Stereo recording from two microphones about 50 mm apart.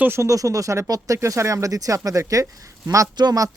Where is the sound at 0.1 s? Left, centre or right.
Right.